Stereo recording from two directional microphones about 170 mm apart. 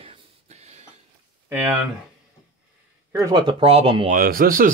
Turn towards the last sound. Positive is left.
turn(degrees=-60)  # may be behind; listen again after turning